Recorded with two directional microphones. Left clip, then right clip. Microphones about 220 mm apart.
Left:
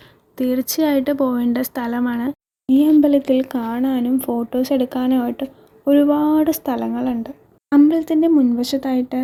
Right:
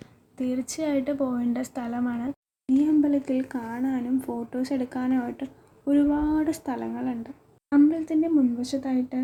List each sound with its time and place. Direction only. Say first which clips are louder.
0.3 s speech: left 10 dB; 40° left (ahead or behind)